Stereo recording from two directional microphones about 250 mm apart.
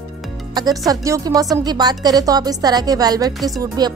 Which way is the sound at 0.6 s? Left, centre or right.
Centre.